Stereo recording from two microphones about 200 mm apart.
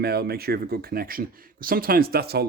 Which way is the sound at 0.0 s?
50° right (ahead or behind).